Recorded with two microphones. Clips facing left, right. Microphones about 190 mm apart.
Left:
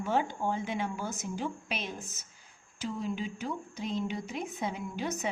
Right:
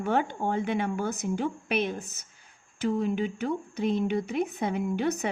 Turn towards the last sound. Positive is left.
turn(degrees=-60)  # may be behind; listen again after turning